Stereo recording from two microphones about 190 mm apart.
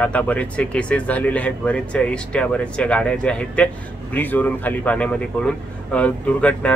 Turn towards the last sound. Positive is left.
turn(degrees=5)  # may be behind; listen again after turning